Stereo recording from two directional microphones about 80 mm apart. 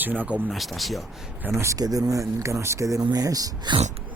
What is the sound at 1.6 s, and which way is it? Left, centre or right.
Speech, right.